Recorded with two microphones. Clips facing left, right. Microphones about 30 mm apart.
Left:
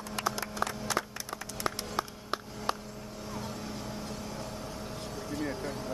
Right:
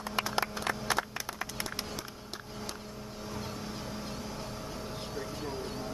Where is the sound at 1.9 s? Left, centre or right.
Left.